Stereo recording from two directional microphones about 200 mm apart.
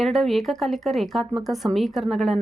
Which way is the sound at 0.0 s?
Centre (ahead or behind).